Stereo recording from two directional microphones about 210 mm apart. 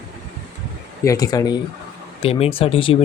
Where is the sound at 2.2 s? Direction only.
25° left (ahead or behind).